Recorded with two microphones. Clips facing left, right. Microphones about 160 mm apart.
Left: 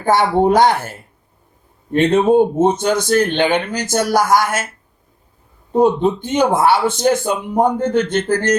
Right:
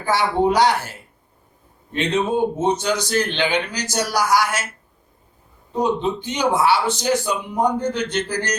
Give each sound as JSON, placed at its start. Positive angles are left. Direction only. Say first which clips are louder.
{"t": 0.0, "sound": "speech", "louder": "left 5 dB", "side_deg": 50}
{"t": 5.7, "sound": "speech", "louder": "left 7 dB", "side_deg": 50}